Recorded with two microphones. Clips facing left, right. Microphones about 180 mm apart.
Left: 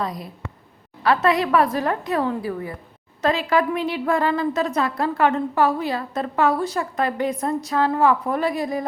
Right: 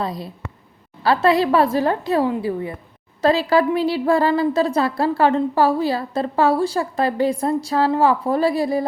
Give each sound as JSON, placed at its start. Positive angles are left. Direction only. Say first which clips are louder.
{"t": 0.0, "sound": "a woman's voice", "louder": "right 2 dB", "side_deg": -30}